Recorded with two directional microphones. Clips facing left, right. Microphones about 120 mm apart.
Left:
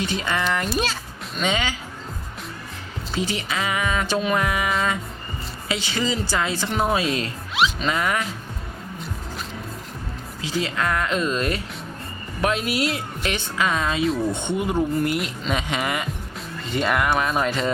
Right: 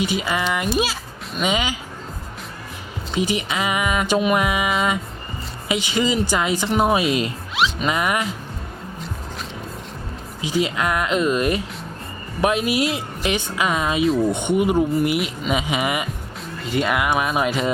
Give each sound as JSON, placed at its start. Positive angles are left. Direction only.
{"t": 0.0, "sound": "speech", "side_deg": -10}
{"t": 3.2, "sound": "speech", "side_deg": -15}
{"t": 10.4, "sound": "speech", "side_deg": -15}